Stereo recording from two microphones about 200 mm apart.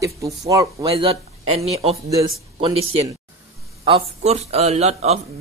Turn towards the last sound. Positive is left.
turn(degrees=-30)  # may be behind; listen again after turning